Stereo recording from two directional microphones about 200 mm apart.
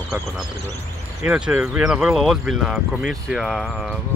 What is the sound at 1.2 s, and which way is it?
Speech, 5° right (ahead or behind).